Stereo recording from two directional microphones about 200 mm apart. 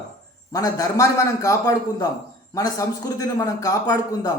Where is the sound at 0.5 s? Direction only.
15° left (ahead or behind).